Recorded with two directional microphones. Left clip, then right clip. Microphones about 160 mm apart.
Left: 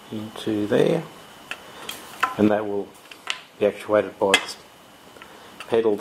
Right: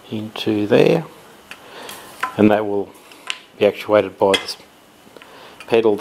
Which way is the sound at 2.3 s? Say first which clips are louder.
Right 8 dB; 15° right (ahead or behind).